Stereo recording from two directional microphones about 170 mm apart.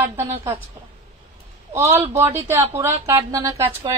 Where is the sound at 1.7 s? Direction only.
15° right (ahead or behind).